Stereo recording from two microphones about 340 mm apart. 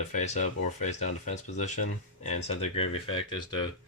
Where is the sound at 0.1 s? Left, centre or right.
Left.